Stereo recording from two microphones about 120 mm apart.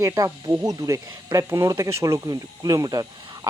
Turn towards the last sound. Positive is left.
turn(degrees=-30)  # may be behind; listen again after turning